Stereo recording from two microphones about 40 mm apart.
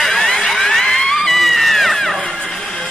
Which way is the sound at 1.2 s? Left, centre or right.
Centre.